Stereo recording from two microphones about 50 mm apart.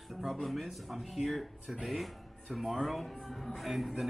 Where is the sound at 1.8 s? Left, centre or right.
Centre.